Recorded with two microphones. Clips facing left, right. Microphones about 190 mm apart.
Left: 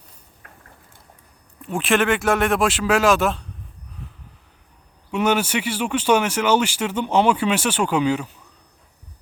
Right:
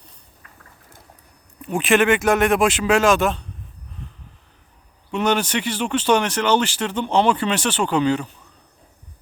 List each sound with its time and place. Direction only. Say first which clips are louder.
0.4 s a sound: left 4 dB; 55° left (ahead or behind)
1.6 s speech: right 2 dB; centre (ahead or behind)
5.1 s speech: even; 10° left (ahead or behind)